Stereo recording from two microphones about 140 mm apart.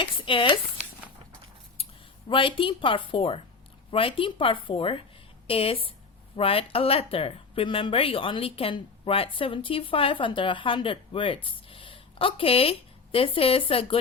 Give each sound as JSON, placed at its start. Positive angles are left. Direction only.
{"t": 0.0, "sound": "speech", "side_deg": 40}
{"t": 2.3, "sound": "speech", "side_deg": 40}